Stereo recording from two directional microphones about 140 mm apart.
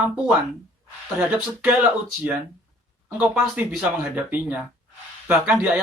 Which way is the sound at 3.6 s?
10° right (ahead or behind).